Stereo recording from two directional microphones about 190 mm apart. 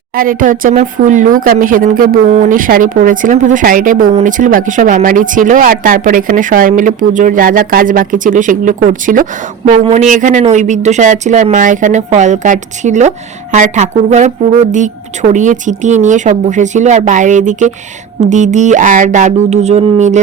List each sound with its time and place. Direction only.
0.2 s a woman's voice: 45° right (ahead or behind)